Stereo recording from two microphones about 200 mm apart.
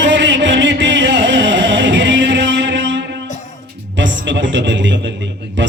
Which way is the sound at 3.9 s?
65° right (ahead or behind).